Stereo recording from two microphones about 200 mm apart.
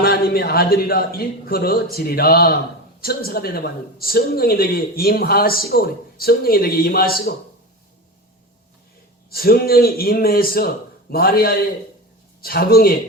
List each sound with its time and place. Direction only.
0.0 s a woman's voice: 50° left (ahead or behind)
9.3 s a woman's voice: 50° left (ahead or behind)